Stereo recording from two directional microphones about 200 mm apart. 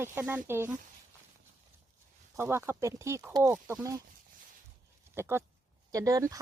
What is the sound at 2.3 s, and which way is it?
Speech, 10° right (ahead or behind).